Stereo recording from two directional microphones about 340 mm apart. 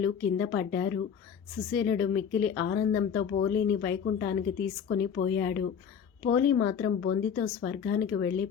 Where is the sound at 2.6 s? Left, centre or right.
Left.